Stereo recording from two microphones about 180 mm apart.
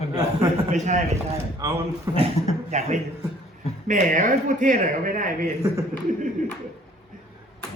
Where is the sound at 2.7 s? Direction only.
40° right (ahead or behind).